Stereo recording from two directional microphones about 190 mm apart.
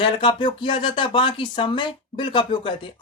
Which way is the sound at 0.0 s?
25° left (ahead or behind).